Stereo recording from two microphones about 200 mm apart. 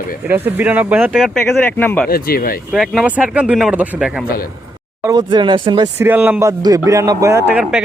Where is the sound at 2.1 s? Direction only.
50° left (ahead or behind).